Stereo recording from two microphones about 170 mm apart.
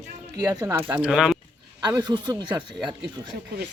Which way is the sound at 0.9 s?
5° right (ahead or behind).